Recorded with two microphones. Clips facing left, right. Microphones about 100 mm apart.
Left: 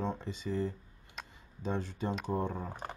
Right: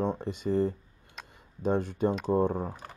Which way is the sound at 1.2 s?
Centre (ahead or behind).